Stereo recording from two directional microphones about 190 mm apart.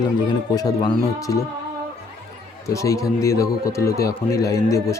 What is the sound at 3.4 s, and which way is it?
Speech, 50° left (ahead or behind).